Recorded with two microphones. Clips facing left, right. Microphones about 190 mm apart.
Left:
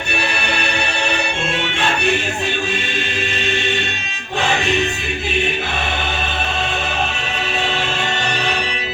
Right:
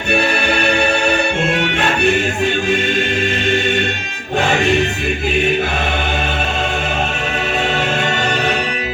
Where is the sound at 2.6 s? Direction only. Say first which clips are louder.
Right 7 dB; 50° right (ahead or behind).